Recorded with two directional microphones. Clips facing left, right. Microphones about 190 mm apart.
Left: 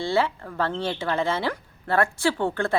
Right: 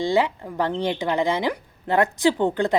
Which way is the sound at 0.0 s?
15° right (ahead or behind).